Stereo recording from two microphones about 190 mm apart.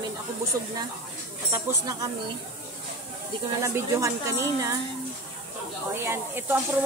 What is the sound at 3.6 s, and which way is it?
Speech, 15° right (ahead or behind).